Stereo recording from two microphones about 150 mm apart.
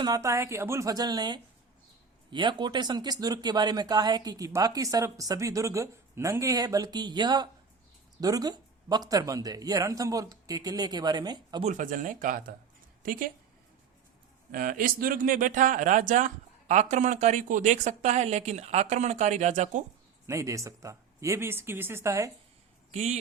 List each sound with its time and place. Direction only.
0.0 s speech: 25° right (ahead or behind)
11.6 s speech: 60° right (ahead or behind)
14.5 s speech: 70° right (ahead or behind); by 19.8 s 50° right (ahead or behind)
20.2 s speech: 20° right (ahead or behind)
22.9 s speech: 50° right (ahead or behind)